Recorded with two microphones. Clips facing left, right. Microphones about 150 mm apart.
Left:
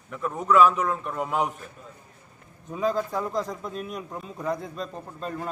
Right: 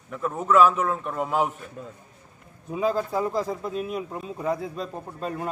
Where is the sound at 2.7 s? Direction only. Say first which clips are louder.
Right 1 dB; 5° right (ahead or behind).